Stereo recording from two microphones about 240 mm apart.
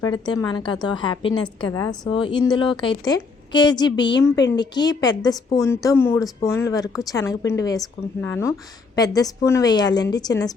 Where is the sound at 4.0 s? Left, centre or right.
Left.